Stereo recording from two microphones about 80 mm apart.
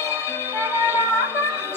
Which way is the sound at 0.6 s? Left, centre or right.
Right.